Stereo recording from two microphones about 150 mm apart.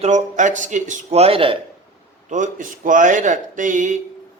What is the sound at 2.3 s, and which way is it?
Speech, 60° right (ahead or behind).